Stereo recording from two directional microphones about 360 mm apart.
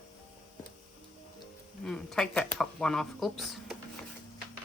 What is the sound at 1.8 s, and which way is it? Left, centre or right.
Speech, centre.